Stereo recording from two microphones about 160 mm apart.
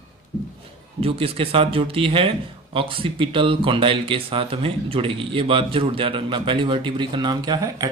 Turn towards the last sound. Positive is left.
turn(degrees=-20)  # may be behind; listen again after turning